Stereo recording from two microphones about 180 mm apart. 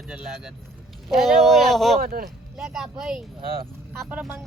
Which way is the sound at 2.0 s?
55° right (ahead or behind).